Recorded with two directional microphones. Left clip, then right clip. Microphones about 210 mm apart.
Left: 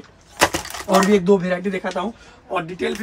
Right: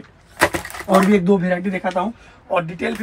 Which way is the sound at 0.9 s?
10° left (ahead or behind).